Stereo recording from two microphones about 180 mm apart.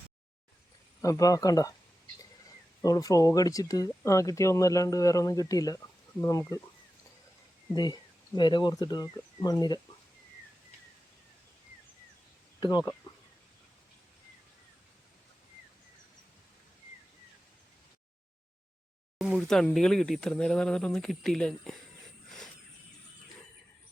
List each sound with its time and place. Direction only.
1.0 s speech: 20° left (ahead or behind)
2.8 s speech: 20° left (ahead or behind)
8.4 s speech: 25° left (ahead or behind)
12.5 s speech: 25° left (ahead or behind)
19.2 s speech: centre (ahead or behind)
22.3 s a sound: centre (ahead or behind)